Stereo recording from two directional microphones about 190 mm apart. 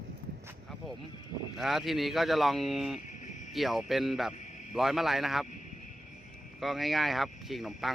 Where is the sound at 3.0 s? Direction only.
40° left (ahead or behind).